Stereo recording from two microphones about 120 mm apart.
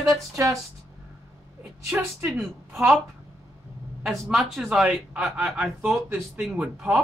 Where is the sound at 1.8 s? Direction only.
10° right (ahead or behind).